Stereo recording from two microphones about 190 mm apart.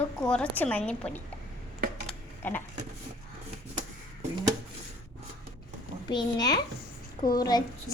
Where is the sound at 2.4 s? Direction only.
10° left (ahead or behind).